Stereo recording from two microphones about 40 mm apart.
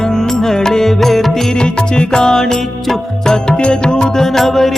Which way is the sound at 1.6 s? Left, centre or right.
Left.